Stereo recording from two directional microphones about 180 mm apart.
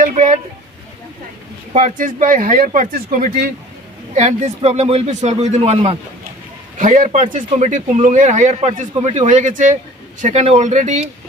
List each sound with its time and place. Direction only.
0.0 s speech: 45° right (ahead or behind)
1.7 s speech: 45° right (ahead or behind)
4.1 s a man's voice: 40° right (ahead or behind)
6.8 s a man's voice: 45° right (ahead or behind)